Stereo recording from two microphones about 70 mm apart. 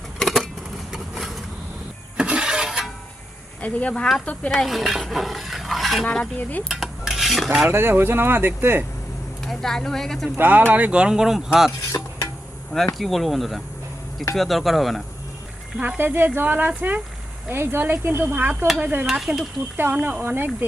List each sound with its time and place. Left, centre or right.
0.2 s a sound: centre
2.1 s a sound: centre
3.6 s speech: left
4.5 s stir: centre
6.7 s cutlery: centre
7.7 s speech: right
9.5 s speech: centre
10.3 s speech: right; by 11.7 s centre
11.9 s stir: left
12.9 s speech: centre
16.0 s speech: right
19.0 s speech: centre
19.9 s speech: centre